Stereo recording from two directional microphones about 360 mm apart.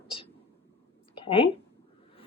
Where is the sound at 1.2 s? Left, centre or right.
Centre.